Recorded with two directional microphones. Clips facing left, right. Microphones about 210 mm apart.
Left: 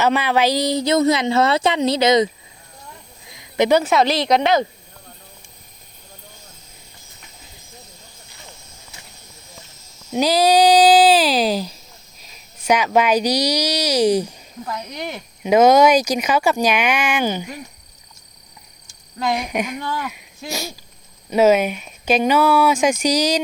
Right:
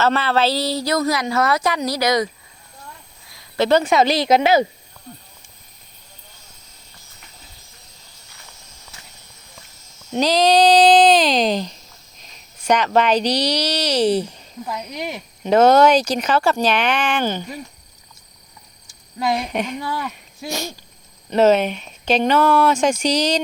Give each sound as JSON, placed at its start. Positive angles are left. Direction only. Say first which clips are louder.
{"t": 0.0, "sound": "a woman's voice", "louder": "left 1 dB", "side_deg": 15}
{"t": 3.2, "sound": "a sound", "louder": "left 1 dB", "side_deg": 20}
{"t": 3.8, "sound": "a woman's voice", "louder": "right 1 dB", "side_deg": 0}
{"t": 10.1, "sound": "speech", "louder": "even", "side_deg": 10}
{"t": 14.6, "sound": "a woman's voice", "louder": "right 1 dB", "side_deg": -5}
{"t": 15.4, "sound": "speech", "louder": "even", "side_deg": 10}
{"t": 19.4, "sound": "speech", "louder": "even", "side_deg": 10}
{"t": 19.8, "sound": "speech", "louder": "even", "side_deg": -10}
{"t": 20.5, "sound": "speech", "louder": "right 1 dB", "side_deg": 10}